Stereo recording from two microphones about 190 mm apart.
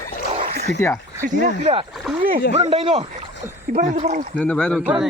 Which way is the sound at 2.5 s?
35° right (ahead or behind).